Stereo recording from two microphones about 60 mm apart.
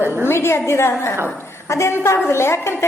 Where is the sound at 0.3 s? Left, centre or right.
Left.